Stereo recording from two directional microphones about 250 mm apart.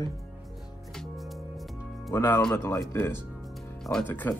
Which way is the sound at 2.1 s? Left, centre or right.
Centre.